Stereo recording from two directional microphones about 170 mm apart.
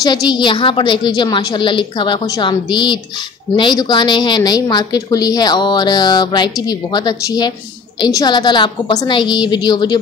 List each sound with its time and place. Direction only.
0.0 s a woman's voice: 25° left (ahead or behind)